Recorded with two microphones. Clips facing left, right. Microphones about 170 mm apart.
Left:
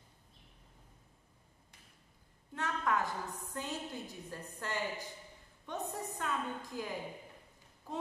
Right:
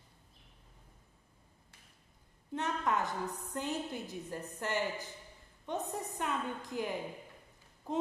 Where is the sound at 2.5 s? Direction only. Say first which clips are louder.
Right 1 dB; 20° right (ahead or behind).